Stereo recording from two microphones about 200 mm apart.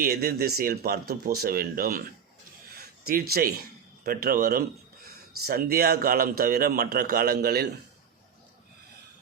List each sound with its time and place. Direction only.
0.0 s a man's voice: 50° right (ahead or behind)
3.1 s a man's voice: 50° right (ahead or behind)